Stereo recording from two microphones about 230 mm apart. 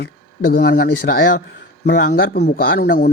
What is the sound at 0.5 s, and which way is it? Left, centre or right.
A man's voice, left.